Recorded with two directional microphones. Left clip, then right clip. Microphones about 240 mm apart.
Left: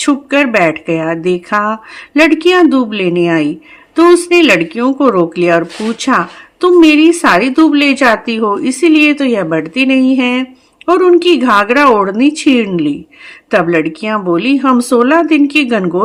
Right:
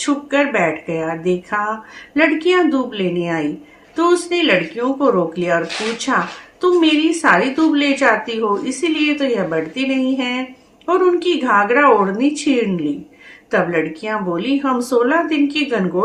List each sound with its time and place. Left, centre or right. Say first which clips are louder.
0.0 s a woman's voice: left 6 dB; left